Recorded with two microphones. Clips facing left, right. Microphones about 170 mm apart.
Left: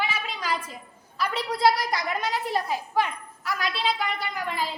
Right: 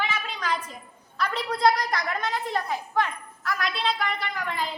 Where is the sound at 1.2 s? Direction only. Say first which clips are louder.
Even; 5° left (ahead or behind).